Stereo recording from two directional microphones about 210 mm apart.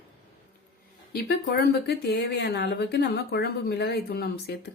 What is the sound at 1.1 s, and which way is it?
Speech, 50° left (ahead or behind).